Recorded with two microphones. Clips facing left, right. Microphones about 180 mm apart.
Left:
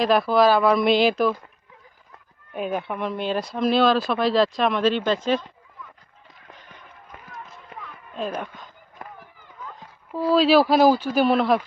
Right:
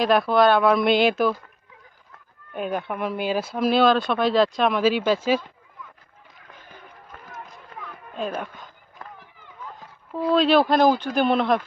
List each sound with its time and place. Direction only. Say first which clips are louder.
0.0 s speech: even; centre (ahead or behind)
2.5 s speech: even; centre (ahead or behind)
7.1 s run: even; centre (ahead or behind)
8.1 s speech: even; centre (ahead or behind)
9.0 s run: left 1 dB; 20° left (ahead or behind)
10.1 s speech: left 1 dB; 5° left (ahead or behind)